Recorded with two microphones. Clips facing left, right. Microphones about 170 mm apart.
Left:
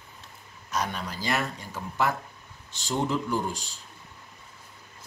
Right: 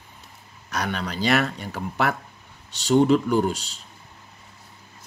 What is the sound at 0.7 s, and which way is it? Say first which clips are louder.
Speech: right 3 dB; 70° right (ahead or behind).